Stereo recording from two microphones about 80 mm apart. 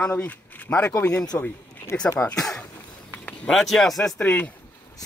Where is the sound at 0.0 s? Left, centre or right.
Left.